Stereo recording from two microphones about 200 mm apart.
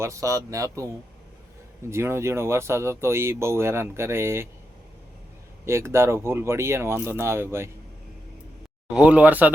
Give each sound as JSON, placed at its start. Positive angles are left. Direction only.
{"t": 0.0, "sound": "speech", "side_deg": -15}
{"t": 5.6, "sound": "speech", "side_deg": -15}
{"t": 9.0, "sound": "speech", "side_deg": -5}